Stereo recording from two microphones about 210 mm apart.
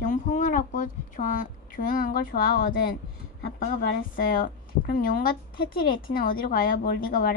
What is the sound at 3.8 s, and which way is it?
A woman's voice, 40° left (ahead or behind).